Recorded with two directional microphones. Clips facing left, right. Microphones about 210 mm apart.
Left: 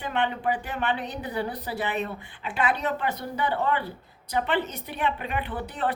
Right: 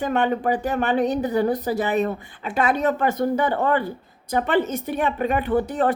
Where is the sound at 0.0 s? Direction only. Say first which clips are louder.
Right 6 dB; 45° right (ahead or behind).